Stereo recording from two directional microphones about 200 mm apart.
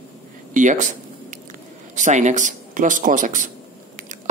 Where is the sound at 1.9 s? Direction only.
35° right (ahead or behind).